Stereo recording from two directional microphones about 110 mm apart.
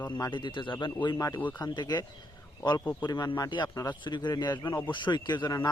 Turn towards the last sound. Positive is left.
turn(degrees=40)  # may be behind; listen again after turning